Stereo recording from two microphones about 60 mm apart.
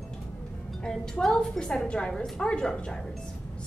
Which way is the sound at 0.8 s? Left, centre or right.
Centre.